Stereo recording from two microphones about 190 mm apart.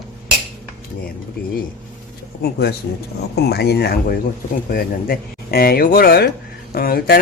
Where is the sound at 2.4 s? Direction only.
55° left (ahead or behind).